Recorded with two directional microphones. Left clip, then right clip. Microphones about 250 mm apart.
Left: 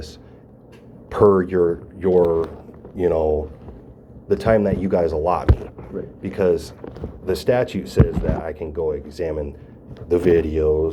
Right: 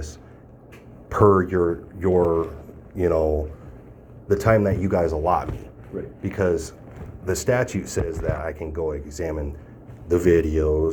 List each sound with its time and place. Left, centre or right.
1.1 s speech: right